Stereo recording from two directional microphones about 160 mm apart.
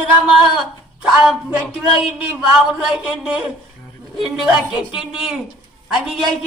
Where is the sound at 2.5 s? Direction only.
5° right (ahead or behind).